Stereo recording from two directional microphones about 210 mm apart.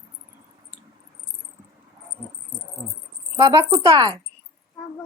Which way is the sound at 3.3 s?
15° right (ahead or behind).